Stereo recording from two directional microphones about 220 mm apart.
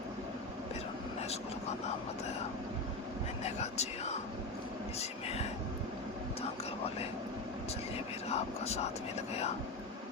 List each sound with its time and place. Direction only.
3.4 s speech: 30° left (ahead or behind)
8.3 s speech: 30° left (ahead or behind)